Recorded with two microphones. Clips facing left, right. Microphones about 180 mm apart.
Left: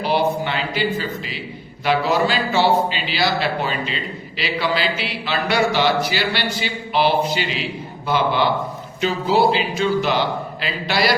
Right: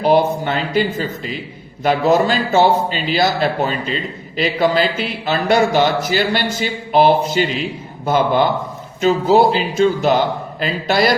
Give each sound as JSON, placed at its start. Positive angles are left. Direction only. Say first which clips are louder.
{"t": 0.0, "sound": "a man's voice", "louder": "right 5 dB", "side_deg": -45}